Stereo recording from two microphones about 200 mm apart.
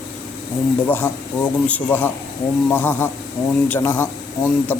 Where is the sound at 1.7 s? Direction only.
10° left (ahead or behind).